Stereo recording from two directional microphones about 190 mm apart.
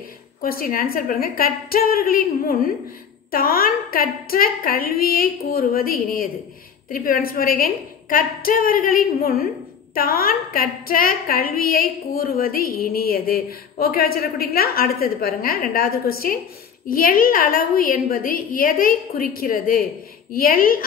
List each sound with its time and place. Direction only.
0.4 s a woman's voice: 50° left (ahead or behind)